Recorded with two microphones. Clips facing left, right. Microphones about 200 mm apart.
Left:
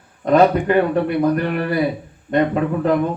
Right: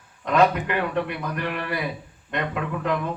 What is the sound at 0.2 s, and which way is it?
A man's voice, 35° left (ahead or behind).